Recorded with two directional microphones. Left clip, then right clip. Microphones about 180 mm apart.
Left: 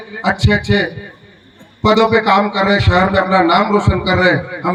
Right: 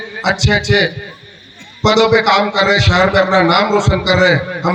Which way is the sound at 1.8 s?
40° left (ahead or behind).